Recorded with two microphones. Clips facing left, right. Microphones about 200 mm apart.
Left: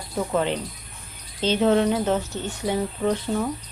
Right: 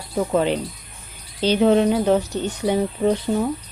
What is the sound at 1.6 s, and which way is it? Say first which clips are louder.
Speech: right 4 dB; 15° right (ahead or behind).